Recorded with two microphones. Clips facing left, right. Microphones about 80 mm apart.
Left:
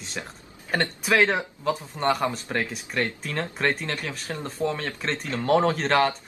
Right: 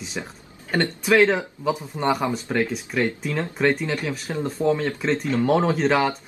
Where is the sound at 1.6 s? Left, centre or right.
Centre.